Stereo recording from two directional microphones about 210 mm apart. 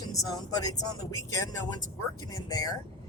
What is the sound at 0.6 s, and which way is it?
Speech, 15° left (ahead or behind).